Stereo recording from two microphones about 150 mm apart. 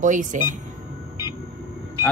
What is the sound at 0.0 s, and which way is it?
Speech, 55° right (ahead or behind).